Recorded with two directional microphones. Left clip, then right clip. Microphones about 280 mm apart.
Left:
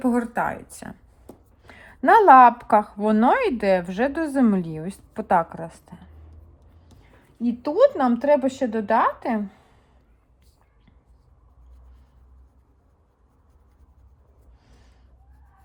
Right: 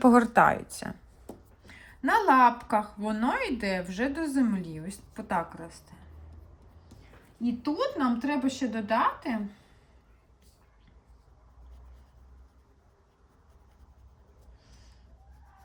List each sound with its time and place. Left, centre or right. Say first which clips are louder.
0.0 s speech: right 3 dB; centre
0.4 s speech: right 4 dB; centre
1.6 s a woman's voice: left 11 dB; centre
7.4 s a woman's voice: left 12 dB; centre